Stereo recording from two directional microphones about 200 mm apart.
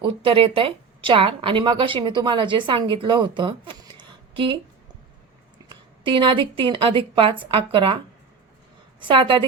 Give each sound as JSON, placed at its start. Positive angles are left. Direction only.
{"t": 0.0, "sound": "a woman's voice", "side_deg": -25}
{"t": 5.6, "sound": "a woman's voice", "side_deg": -25}
{"t": 9.0, "sound": "a woman's voice", "side_deg": -25}